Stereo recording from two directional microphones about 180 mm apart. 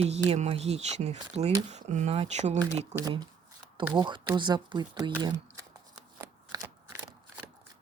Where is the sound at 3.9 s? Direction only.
25° right (ahead or behind).